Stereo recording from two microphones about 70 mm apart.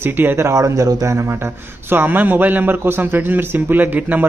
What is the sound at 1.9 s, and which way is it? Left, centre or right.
A man's voice, right.